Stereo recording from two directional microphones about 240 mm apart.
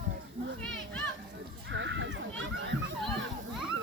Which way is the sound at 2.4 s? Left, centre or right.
Right.